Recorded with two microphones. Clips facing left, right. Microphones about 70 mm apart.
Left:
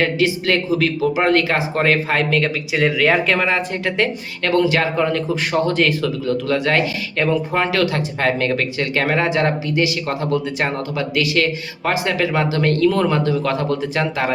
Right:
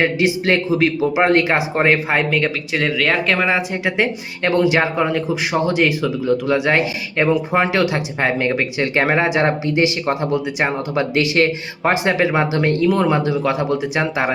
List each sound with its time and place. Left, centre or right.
0.0 s speech: right
2.8 s speech: centre
3.3 s speech: centre
11.1 s speech: right